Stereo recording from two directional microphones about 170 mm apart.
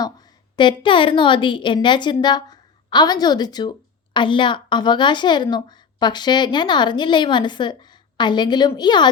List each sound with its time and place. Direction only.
0.5 s a woman's voice: 30° left (ahead or behind)